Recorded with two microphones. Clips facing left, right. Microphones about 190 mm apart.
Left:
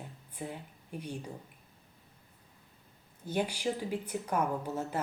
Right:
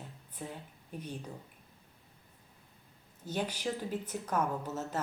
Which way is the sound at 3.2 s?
10° left (ahead or behind).